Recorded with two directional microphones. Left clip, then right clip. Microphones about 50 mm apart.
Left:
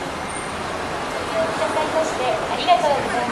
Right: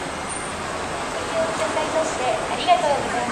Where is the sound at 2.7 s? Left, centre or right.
Left.